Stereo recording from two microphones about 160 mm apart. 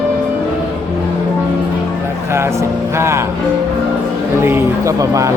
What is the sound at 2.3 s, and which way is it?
Music, 15° right (ahead or behind).